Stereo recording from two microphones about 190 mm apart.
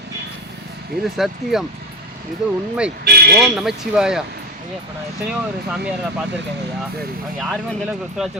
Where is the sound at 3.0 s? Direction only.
55° right (ahead or behind).